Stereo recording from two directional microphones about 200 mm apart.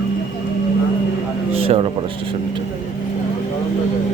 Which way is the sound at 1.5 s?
30° right (ahead or behind).